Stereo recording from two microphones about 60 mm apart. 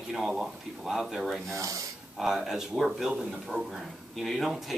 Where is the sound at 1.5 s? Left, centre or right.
Right.